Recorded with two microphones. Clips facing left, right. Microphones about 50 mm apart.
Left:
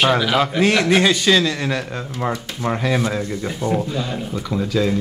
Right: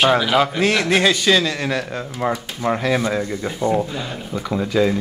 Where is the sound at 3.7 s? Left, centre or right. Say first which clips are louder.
Right 1 dB; centre.